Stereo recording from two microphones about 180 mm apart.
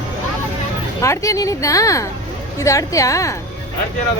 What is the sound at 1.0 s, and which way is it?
Speech, 15° left (ahead or behind).